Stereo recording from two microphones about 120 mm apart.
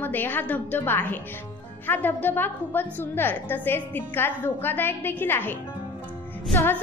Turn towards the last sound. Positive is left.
turn(degrees=15)  # may be behind; listen again after turning